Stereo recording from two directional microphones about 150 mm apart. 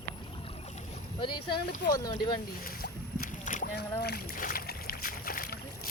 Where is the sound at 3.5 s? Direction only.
60° left (ahead or behind).